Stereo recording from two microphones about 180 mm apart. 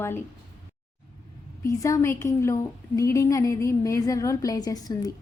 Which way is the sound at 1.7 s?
20° left (ahead or behind).